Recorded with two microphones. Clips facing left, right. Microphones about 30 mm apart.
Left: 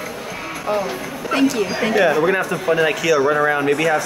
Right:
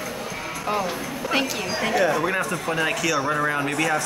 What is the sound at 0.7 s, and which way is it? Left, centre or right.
Speech, centre.